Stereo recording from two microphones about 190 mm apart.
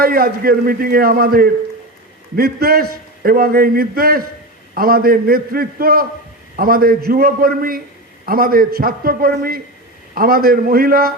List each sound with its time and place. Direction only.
0.0 s a man's voice: 50° right (ahead or behind)